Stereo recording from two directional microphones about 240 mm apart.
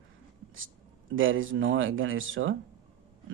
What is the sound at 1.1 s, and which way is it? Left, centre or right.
Speech, right.